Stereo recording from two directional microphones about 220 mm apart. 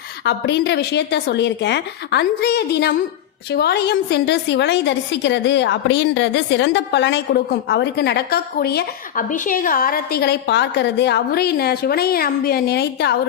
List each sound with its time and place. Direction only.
0.3 s a woman's voice: 50° left (ahead or behind)